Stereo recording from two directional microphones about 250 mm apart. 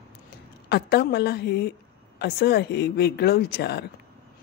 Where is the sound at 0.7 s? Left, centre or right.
Left.